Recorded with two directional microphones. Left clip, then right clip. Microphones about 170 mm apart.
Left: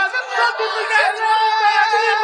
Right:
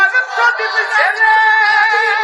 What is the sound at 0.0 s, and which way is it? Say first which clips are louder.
Chatter: right 6 dB; 25° right (ahead or behind).